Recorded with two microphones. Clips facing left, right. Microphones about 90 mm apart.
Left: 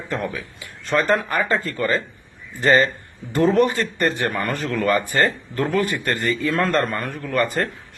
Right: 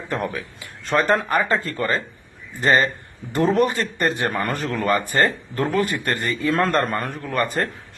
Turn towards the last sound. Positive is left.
turn(degrees=-25)  # may be behind; listen again after turning